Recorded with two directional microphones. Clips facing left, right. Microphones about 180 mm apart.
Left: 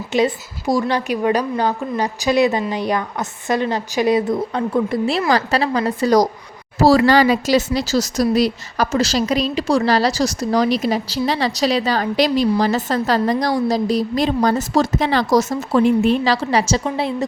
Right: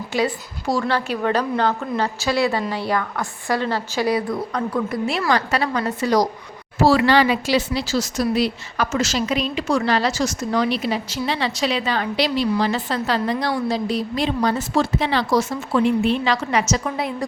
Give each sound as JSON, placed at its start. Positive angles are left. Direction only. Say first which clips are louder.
{"t": 0.1, "sound": "a woman's voice", "louder": "left 5 dB", "side_deg": 20}